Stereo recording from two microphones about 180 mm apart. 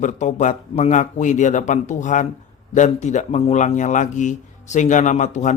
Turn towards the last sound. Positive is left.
turn(degrees=40)  # may be behind; listen again after turning